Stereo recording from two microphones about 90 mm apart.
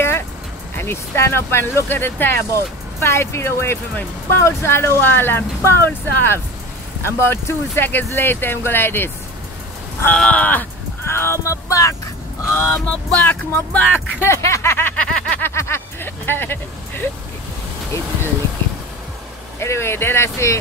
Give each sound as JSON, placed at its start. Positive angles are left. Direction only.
{"t": 0.7, "sound": "speech", "side_deg": 25}
{"t": 10.0, "sound": "crow", "side_deg": 15}
{"t": 11.1, "sound": "music", "side_deg": 30}
{"t": 12.4, "sound": "speech", "side_deg": 30}
{"t": 12.8, "sound": "crow", "side_deg": 10}
{"t": 13.7, "sound": "speech", "side_deg": 25}
{"t": 15.2, "sound": "vehicle", "side_deg": 15}
{"t": 15.5, "sound": "speech", "side_deg": 30}
{"t": 19.6, "sound": "speech", "side_deg": 30}